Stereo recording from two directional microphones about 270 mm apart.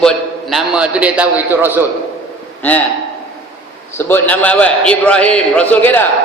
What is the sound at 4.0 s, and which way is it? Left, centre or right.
A man's voice, centre.